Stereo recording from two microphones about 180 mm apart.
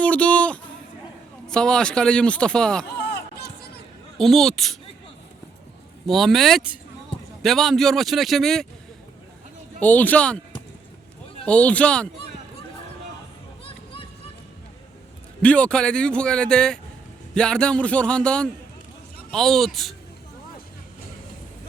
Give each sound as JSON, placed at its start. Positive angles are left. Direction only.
{"t": 0.0, "sound": "a man's voice", "side_deg": 5}
{"t": 2.9, "sound": "a sound", "side_deg": 65}
{"t": 4.2, "sound": "a man's voice", "side_deg": 0}
{"t": 6.1, "sound": "a man's voice", "side_deg": 0}
{"t": 9.8, "sound": "speech", "side_deg": 10}
{"t": 11.4, "sound": "speech", "side_deg": 10}
{"t": 15.4, "sound": "a man's voice", "side_deg": 5}